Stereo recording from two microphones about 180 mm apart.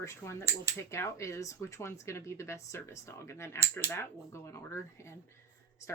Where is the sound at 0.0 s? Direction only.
15° left (ahead or behind).